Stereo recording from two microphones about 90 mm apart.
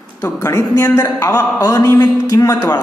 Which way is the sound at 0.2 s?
30° left (ahead or behind).